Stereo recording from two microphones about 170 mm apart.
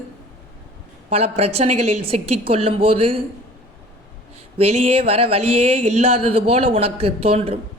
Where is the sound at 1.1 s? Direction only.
40° right (ahead or behind).